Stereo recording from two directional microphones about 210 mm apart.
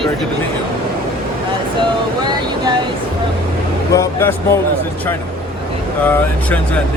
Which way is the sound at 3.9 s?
15° left (ahead or behind).